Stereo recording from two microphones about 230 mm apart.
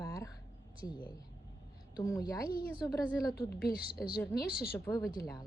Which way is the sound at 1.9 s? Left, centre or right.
Centre.